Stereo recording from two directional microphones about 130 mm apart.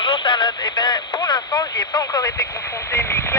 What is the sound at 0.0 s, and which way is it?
Speech, 40° left (ahead or behind).